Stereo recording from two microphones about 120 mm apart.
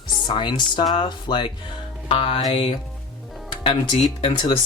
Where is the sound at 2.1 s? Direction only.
50° left (ahead or behind).